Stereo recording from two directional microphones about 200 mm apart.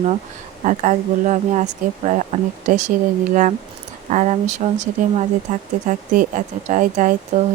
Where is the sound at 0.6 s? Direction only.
40° right (ahead or behind).